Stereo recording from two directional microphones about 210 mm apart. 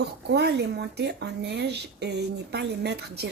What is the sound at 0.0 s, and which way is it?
Speech, 55° right (ahead or behind).